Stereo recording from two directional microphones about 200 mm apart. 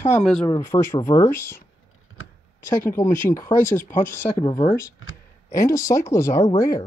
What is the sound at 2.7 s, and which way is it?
Speech, 15° left (ahead or behind).